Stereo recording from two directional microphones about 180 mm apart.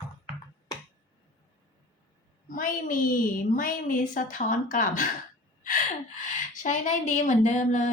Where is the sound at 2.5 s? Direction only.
50° left (ahead or behind).